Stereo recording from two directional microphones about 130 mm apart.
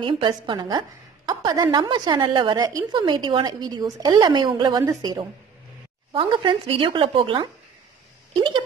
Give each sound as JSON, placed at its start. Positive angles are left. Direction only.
{"t": 0.0, "sound": "a woman's voice", "side_deg": -40}